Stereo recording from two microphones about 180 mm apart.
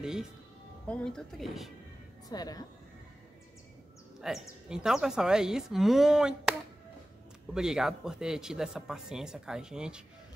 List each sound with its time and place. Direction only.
0.0 s speech: 5° right (ahead or behind)
2.2 s speech: 20° left (ahead or behind)
4.2 s speech: 5° right (ahead or behind)
7.5 s speech: 5° right (ahead or behind)